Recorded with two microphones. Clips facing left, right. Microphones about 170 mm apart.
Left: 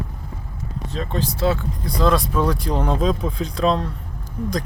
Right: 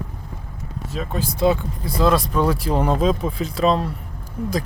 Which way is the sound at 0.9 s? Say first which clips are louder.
Left 1 dB; 5° right (ahead or behind).